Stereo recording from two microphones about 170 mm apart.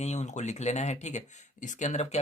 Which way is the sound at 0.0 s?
40° left (ahead or behind).